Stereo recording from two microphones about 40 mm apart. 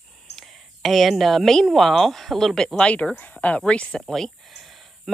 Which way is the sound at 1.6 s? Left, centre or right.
Centre.